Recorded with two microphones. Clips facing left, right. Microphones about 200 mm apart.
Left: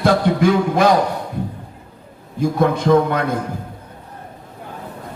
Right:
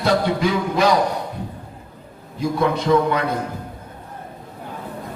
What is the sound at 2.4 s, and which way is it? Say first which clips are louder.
Speech: left 3 dB; 50° left (ahead or behind).